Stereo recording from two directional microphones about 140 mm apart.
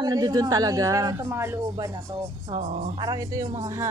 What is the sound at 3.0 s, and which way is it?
Speech, 25° right (ahead or behind).